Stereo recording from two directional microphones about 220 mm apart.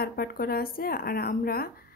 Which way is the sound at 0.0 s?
45° left (ahead or behind).